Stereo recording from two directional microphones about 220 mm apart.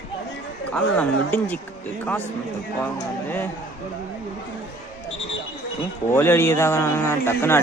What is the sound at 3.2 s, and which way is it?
Speech, 10° left (ahead or behind).